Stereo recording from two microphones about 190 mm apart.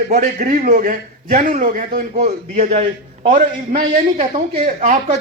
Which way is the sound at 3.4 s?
50° right (ahead or behind).